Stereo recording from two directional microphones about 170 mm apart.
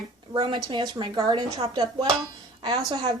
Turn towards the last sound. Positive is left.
turn(degrees=-25)  # may be behind; listen again after turning